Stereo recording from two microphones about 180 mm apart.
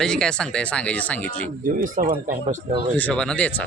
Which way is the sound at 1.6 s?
50° right (ahead or behind).